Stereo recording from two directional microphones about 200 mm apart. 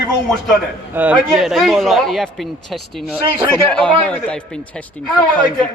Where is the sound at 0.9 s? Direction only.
10° right (ahead or behind).